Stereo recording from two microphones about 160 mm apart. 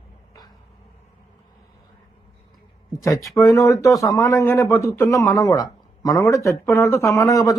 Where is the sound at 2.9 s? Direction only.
20° left (ahead or behind).